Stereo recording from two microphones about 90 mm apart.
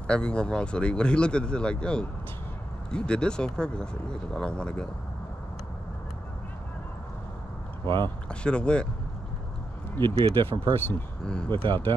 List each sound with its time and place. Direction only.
0.0 s speech: 10° left (ahead or behind)
8.3 s speech: 10° left (ahead or behind)
10.0 s speech: 85° right
11.2 s speech: 10° left (ahead or behind)
11.5 s speech: 65° right (ahead or behind)